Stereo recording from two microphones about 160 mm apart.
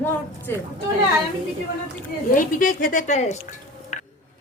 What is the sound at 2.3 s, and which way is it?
Speech, 60° left (ahead or behind).